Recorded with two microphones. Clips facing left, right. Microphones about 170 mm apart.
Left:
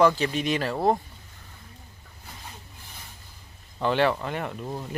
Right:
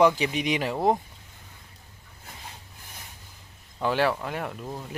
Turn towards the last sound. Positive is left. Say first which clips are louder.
# left 2 dB
turn(degrees=0)  # may be behind; listen again after turning